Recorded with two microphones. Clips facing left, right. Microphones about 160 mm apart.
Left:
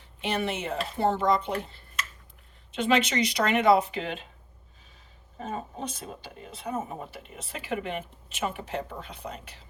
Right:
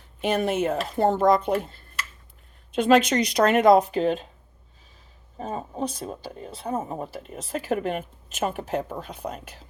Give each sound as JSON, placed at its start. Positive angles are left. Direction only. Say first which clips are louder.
{"t": 0.2, "sound": "speech", "louder": "right 6 dB", "side_deg": -45}
{"t": 2.8, "sound": "speech", "louder": "right 5 dB", "side_deg": -45}
{"t": 5.4, "sound": "speech", "louder": "right 5 dB", "side_deg": -35}